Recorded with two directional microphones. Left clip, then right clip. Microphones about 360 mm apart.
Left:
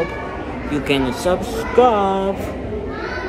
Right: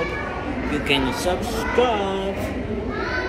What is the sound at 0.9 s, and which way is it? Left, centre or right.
Speech, centre.